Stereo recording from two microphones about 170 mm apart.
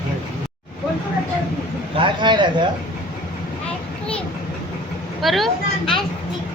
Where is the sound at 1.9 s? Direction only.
30° right (ahead or behind).